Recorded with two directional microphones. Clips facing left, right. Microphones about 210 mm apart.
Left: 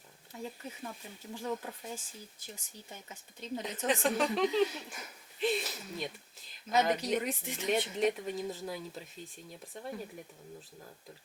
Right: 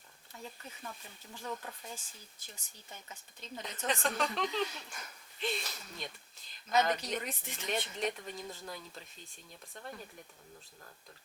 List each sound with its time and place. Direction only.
0.3 s speech: 5° left (ahead or behind)